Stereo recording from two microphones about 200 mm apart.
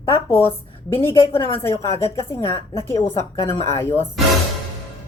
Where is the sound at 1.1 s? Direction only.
15° left (ahead or behind).